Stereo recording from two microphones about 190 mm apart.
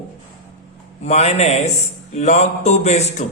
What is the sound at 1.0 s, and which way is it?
A man's voice, 35° left (ahead or behind).